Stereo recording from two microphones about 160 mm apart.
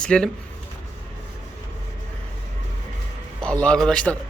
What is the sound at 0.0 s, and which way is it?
Speech, 5° left (ahead or behind).